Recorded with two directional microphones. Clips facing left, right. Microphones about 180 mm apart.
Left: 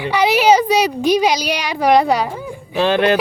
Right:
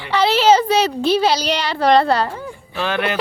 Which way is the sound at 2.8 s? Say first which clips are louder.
Left 7 dB; 35° left (ahead or behind).